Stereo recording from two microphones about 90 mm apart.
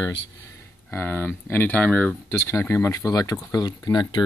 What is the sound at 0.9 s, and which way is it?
Speech, 25° left (ahead or behind).